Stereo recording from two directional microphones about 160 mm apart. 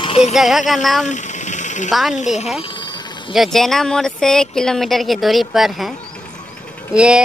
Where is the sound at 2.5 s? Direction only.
30° left (ahead or behind).